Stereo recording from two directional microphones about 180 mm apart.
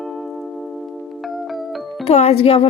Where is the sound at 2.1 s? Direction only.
35° left (ahead or behind).